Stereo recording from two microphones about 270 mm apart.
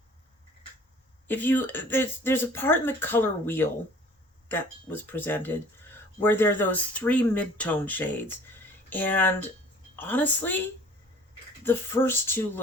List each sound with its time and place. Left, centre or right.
1.3 s speech: centre
11.6 s speech: centre